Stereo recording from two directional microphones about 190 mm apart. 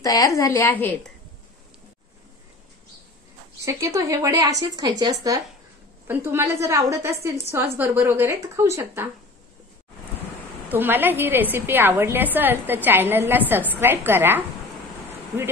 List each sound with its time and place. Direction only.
0.0 s a woman's voice: 20° left (ahead or behind)
3.6 s a woman's voice: 15° right (ahead or behind)
10.7 s a woman's voice: 10° right (ahead or behind)